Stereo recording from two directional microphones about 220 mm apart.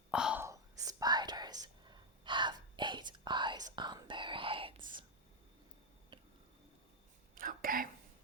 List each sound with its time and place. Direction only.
0.1 s whispering: 5° right (ahead or behind); by 4.7 s 25° right (ahead or behind)
7.3 s whispering: 40° right (ahead or behind)